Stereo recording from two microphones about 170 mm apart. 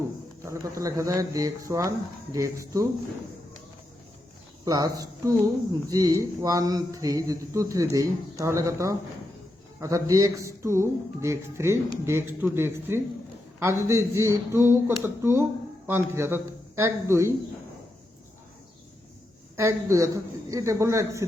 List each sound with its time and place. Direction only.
0.4 s speech: 20° right (ahead or behind)
4.6 s speech: 20° right (ahead or behind)
19.5 s speech: 15° right (ahead or behind)